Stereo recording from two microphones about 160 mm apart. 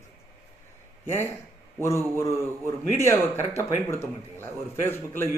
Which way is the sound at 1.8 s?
15° left (ahead or behind).